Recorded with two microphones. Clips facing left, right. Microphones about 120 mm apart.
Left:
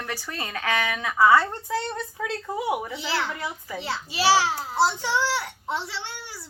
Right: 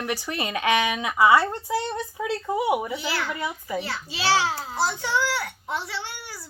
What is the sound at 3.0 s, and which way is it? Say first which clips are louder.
Speech: left 1 dB; 25° left (ahead or behind).